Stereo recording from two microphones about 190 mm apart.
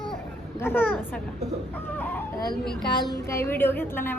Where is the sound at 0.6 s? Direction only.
10° left (ahead or behind).